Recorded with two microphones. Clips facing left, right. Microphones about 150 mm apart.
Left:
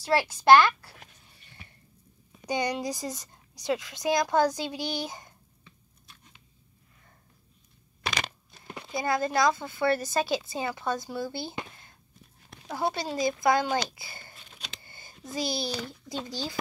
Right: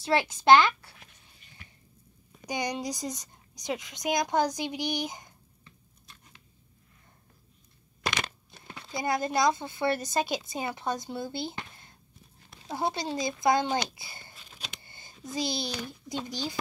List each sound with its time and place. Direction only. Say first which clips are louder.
0.0 s speech: left 1 dB; 20° right (ahead or behind)
2.4 s a woman's voice: left 3 dB; 15° right (ahead or behind)
9.0 s speech: left 1 dB; 20° right (ahead or behind)
12.6 s speech: left 1 dB; 20° right (ahead or behind)
14.9 s a sound: left 2 dB; 20° right (ahead or behind)
15.3 s a woman's voice: left 1 dB; 20° right (ahead or behind)